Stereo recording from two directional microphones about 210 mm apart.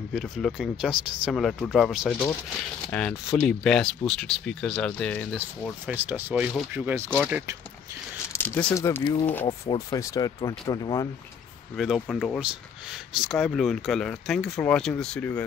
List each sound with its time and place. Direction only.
0.1 s speech: centre (ahead or behind)
5.9 s speech: 10° right (ahead or behind)
8.3 s speech: 5° left (ahead or behind)
9.5 s speech: 20° left (ahead or behind)
11.7 s speech: centre (ahead or behind)